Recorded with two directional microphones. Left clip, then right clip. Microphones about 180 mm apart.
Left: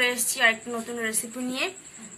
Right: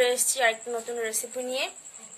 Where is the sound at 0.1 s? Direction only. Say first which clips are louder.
Left 2 dB; 45° right (ahead or behind).